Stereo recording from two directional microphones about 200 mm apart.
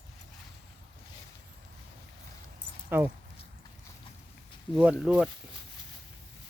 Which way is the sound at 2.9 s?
10° right (ahead or behind).